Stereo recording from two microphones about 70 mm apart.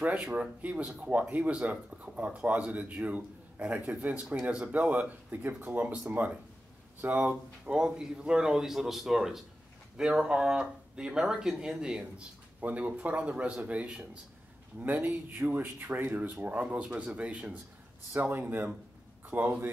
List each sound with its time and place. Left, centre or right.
0.3 s speech: right